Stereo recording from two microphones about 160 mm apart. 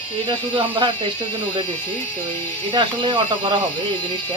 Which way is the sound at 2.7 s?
30° right (ahead or behind).